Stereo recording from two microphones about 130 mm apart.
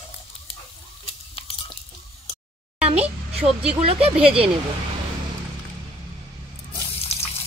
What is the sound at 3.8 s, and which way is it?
Speech, 50° right (ahead or behind).